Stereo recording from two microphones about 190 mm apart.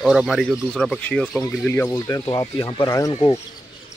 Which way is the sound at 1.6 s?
15° left (ahead or behind).